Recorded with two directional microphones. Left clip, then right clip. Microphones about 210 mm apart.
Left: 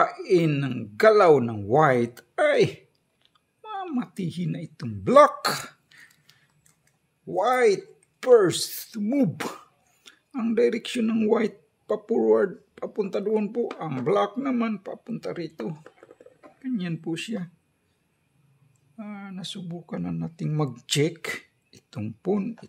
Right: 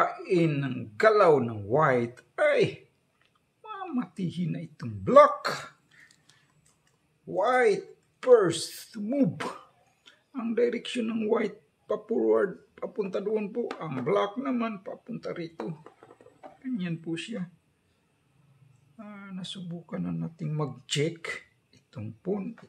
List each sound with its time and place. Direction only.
0.0 s speech: 45° left (ahead or behind)
7.3 s speech: 45° left (ahead or behind)
16.6 s speech: 40° left (ahead or behind)
18.9 s speech: 40° left (ahead or behind)